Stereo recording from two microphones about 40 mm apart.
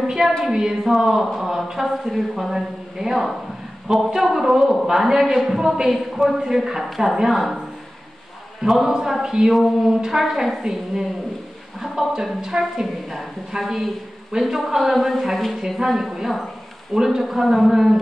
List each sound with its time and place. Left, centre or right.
0.0 s a woman's voice: centre
0.8 s a man's voice: centre
8.6 s speech: centre
9.2 s a man's voice: centre
9.5 s a man's voice: centre
12.1 s a man's voice: centre
17.2 s speech: centre